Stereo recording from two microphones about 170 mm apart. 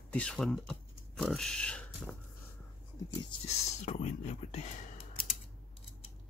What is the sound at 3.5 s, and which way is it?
Whispering, 40° left (ahead or behind).